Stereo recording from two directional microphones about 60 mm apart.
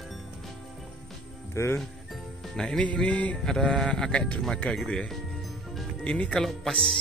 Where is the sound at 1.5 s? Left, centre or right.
Left.